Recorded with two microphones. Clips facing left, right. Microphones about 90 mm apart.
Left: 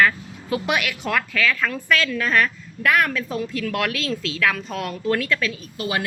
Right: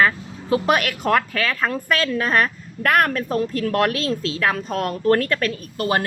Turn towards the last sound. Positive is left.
turn(degrees=-45)  # may be behind; listen again after turning